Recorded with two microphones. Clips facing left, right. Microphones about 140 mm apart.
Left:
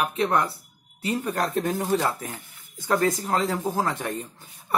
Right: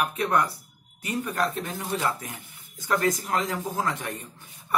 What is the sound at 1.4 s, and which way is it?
Speech, 45° left (ahead or behind).